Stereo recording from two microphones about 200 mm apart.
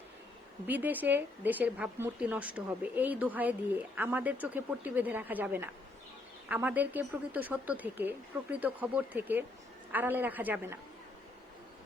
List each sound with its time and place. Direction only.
0.7 s speech: 10° right (ahead or behind)